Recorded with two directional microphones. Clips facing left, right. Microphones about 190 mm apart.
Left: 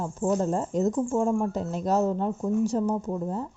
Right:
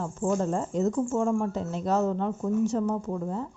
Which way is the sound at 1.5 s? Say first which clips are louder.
Left 1 dB; 40° left (ahead or behind).